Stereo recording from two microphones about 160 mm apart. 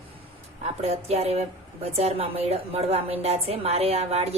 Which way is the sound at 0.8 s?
40° right (ahead or behind).